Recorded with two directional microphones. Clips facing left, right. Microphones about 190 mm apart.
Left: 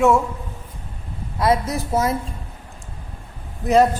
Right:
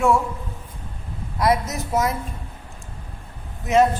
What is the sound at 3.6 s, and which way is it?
Speech, 35° left (ahead or behind).